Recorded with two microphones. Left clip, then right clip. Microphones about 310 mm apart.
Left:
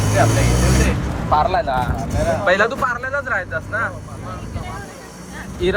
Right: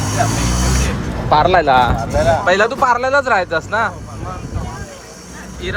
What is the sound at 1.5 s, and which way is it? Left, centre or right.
Speech, right.